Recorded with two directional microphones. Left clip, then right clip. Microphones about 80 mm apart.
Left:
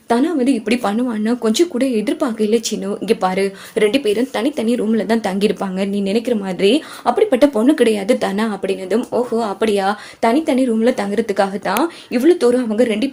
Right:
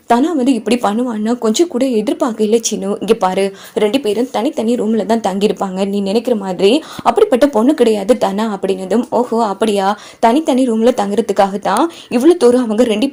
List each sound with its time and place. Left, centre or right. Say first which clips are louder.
0.1 s speech: right 3 dB; right
0.8 s a woman's voice: right 3 dB; right
3.8 s a woman's voice: right 1 dB; right
7.0 s speech: right 3 dB; right
7.6 s a woman's voice: right 2 dB; right
10.2 s speech: right 3 dB; right